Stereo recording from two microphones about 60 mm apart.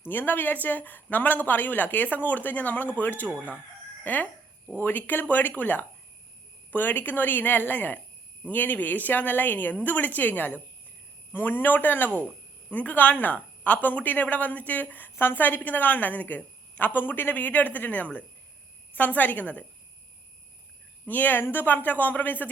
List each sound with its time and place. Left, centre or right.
0.1 s a woman's voice: left
15.1 s a woman's voice: left
21.1 s a woman's voice: left